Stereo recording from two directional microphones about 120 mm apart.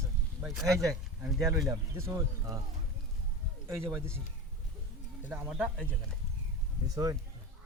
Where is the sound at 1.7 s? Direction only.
25° right (ahead or behind).